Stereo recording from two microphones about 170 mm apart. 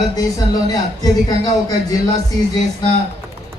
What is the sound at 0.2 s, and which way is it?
Speech, 20° left (ahead or behind).